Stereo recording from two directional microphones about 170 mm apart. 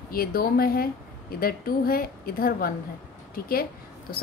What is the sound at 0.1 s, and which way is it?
A woman's voice, 60° left (ahead or behind).